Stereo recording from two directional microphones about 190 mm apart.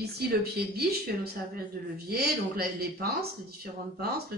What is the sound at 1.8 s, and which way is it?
A man's voice, 45° right (ahead or behind).